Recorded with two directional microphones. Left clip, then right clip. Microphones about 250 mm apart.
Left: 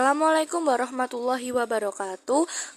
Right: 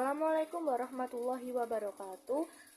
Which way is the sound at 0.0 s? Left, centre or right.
Left.